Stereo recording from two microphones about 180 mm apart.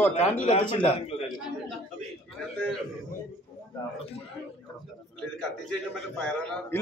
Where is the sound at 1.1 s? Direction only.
35° left (ahead or behind).